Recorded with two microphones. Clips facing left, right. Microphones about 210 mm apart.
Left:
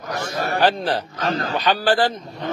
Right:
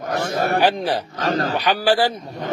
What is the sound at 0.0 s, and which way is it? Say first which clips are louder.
Speech: right 4 dB; 55° right (ahead or behind).